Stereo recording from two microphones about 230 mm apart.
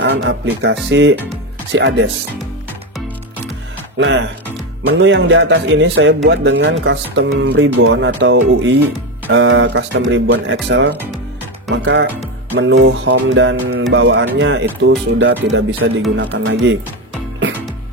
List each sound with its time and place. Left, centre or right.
0.0 s a man's voice: right
4.0 s a man's voice: right